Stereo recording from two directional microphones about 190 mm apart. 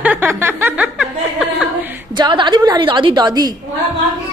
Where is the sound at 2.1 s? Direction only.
25° right (ahead or behind).